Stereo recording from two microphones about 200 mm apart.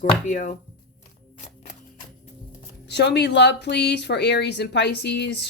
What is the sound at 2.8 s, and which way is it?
Speech, 55° left (ahead or behind).